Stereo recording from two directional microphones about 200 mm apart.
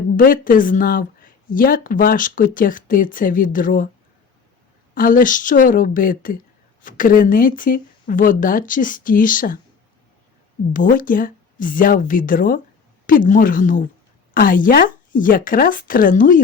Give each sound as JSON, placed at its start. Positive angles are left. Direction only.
{"t": 0.2, "sound": "speech", "side_deg": 45}
{"t": 4.9, "sound": "speech", "side_deg": 45}
{"t": 10.7, "sound": "speech", "side_deg": 40}